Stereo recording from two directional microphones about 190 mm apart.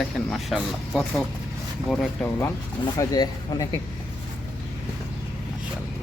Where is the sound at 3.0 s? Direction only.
20° left (ahead or behind).